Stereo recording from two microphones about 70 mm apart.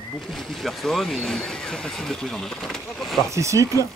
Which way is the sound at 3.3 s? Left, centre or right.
Right.